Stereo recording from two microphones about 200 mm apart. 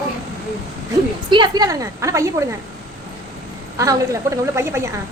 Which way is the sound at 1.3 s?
20° right (ahead or behind).